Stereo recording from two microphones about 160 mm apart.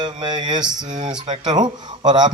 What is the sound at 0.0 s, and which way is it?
Speech, 30° right (ahead or behind).